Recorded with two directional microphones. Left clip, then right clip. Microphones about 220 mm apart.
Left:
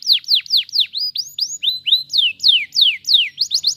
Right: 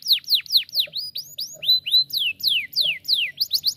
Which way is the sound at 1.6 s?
25° right (ahead or behind).